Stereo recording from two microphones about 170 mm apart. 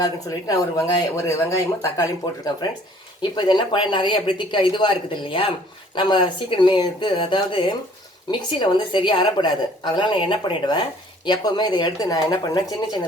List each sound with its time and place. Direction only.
0.0 s speech: 20° left (ahead or behind)